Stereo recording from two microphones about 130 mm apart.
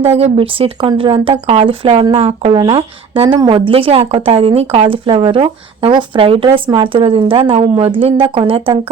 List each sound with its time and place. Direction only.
0.0 s speech: 50° right (ahead or behind)